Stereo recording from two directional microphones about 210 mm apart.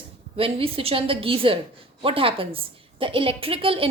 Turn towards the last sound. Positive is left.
turn(degrees=-25)  # may be behind; listen again after turning